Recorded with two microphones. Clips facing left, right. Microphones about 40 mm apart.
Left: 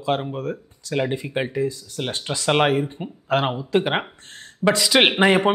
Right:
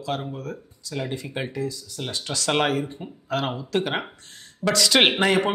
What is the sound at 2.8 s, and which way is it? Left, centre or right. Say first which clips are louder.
Speech: left 4 dB; left.